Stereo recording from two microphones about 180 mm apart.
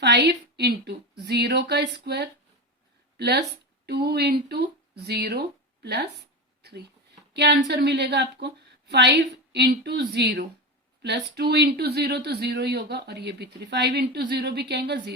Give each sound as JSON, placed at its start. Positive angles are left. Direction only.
{"t": 0.0, "sound": "speech", "side_deg": -70}